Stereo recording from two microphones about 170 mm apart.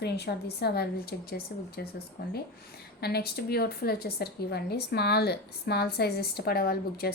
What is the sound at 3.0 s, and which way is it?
A woman's voice, 70° left (ahead or behind).